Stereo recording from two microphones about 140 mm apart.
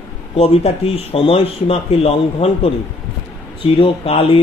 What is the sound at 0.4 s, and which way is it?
Speech, 45° left (ahead or behind).